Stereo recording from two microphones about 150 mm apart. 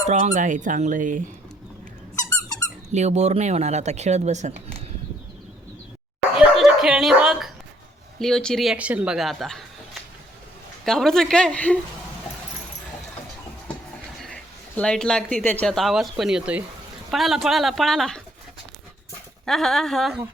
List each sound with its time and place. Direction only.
0.1 s speech: 55° right (ahead or behind)
2.9 s speech: 50° right (ahead or behind)
6.3 s dog: 5° right (ahead or behind)
8.2 s speech: 5° left (ahead or behind)
14.8 s speech: 5° left (ahead or behind)
19.5 s speech: centre (ahead or behind)